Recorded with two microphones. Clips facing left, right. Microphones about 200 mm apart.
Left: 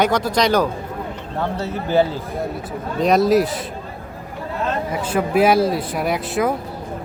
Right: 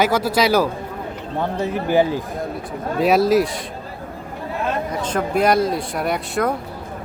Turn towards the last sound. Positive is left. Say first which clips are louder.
# left 1 dB
turn(degrees=0)  # may be behind; listen again after turning